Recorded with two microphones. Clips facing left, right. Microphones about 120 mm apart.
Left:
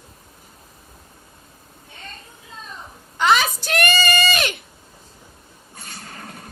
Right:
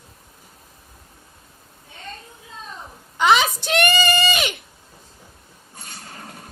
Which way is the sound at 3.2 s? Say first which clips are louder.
Right 1 dB; 15° right (ahead or behind).